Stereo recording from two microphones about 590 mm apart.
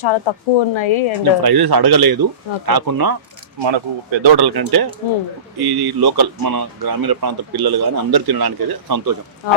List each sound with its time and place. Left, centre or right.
0.0 s speech: left
1.4 s speech: right
3.6 s speech: right